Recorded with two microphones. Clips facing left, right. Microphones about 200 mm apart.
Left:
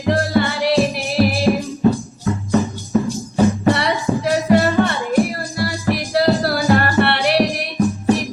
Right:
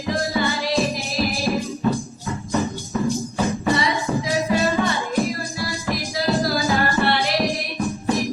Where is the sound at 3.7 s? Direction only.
65° left (ahead or behind).